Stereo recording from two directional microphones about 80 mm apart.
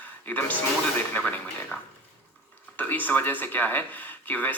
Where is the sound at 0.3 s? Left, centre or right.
Left.